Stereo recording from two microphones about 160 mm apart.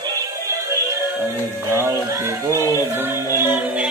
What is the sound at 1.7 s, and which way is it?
Speech, 15° right (ahead or behind).